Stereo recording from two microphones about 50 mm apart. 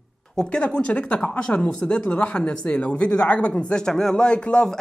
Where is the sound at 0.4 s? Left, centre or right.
Centre.